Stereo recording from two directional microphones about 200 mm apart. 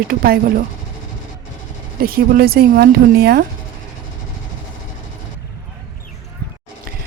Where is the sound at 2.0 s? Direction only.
50° right (ahead or behind).